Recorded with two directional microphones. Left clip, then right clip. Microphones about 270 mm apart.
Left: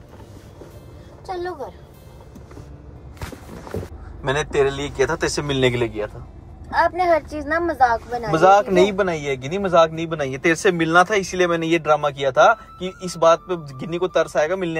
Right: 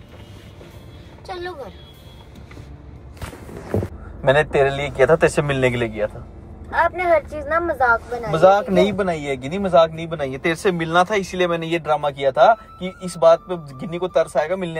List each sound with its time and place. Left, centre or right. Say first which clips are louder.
4.2 s a man's voice: right 4 dB; centre
5.6 s speech: left 3 dB; left
6.7 s a man's voice: even; left
8.3 s a man's voice: even; left